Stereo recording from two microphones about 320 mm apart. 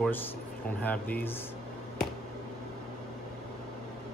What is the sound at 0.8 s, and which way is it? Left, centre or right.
Speech, centre.